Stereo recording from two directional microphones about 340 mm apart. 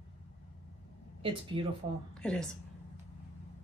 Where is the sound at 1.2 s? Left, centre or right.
Centre.